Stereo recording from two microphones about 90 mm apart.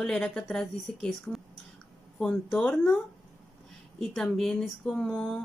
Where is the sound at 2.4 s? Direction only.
20° left (ahead or behind).